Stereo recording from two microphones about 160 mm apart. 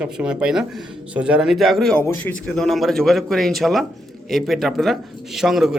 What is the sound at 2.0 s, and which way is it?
Speech, 15° left (ahead or behind).